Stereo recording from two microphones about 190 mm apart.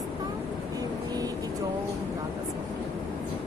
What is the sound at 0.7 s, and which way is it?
Vehicle, 20° right (ahead or behind).